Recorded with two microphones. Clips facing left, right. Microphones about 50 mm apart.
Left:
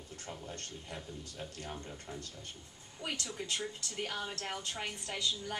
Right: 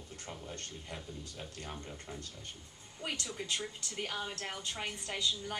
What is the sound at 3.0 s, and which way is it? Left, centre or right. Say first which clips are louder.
A woman's voice: even; centre.